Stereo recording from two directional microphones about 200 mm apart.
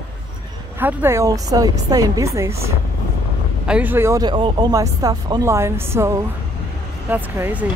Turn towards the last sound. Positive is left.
turn(degrees=-10)  # may be behind; listen again after turning